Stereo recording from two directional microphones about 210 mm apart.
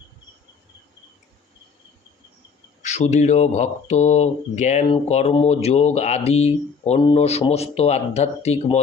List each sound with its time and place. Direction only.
2.8 s speech: 35° left (ahead or behind)